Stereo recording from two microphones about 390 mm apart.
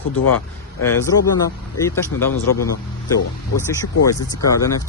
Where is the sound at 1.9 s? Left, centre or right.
Centre.